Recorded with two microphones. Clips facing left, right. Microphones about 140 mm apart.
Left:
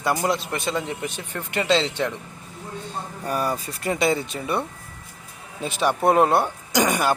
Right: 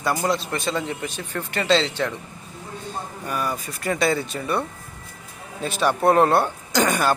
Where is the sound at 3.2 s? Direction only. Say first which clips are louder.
Left 3 dB; 35° left (ahead or behind).